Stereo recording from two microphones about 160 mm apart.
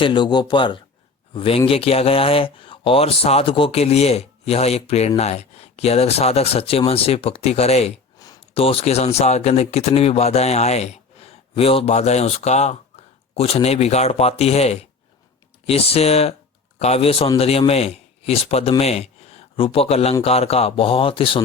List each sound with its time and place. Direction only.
0.0 s speech: 30° left (ahead or behind)
8.2 s a sound: 20° left (ahead or behind)
8.5 s a man's voice: 35° left (ahead or behind)